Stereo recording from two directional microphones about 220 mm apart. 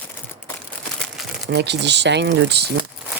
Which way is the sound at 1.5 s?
50° right (ahead or behind).